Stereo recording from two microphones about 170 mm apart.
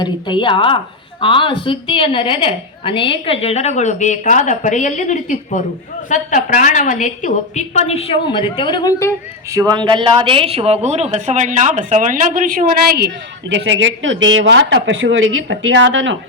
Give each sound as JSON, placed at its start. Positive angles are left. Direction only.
{"t": 0.0, "sound": "a woman's voice", "side_deg": 30}
{"t": 9.5, "sound": "speech", "side_deg": -20}
{"t": 13.5, "sound": "speech", "side_deg": -90}